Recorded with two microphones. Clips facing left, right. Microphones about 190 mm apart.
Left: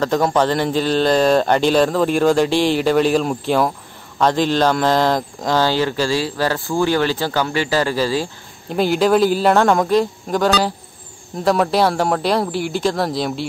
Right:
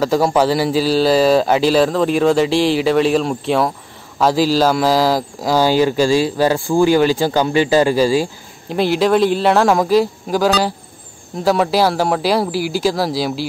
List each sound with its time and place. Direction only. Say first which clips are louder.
0.0 s speech: right 2 dB; 5° right (ahead or behind)
8.6 s speech: right 1 dB; centre (ahead or behind)